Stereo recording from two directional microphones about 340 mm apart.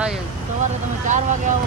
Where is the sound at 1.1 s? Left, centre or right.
Right.